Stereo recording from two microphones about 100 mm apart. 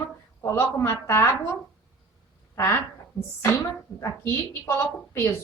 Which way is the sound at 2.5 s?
20° left (ahead or behind).